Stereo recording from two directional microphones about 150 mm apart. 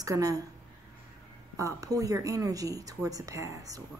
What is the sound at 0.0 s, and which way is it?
Speech, 20° right (ahead or behind).